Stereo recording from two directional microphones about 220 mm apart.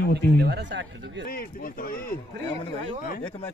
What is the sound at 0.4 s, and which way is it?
Speech, 50° right (ahead or behind).